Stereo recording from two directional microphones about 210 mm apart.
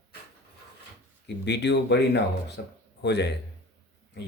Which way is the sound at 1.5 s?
55° left (ahead or behind).